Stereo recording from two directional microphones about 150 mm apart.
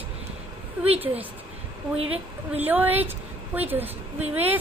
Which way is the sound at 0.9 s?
40° right (ahead or behind).